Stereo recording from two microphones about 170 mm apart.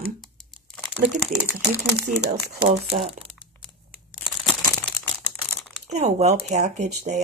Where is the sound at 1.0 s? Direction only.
55° right (ahead or behind).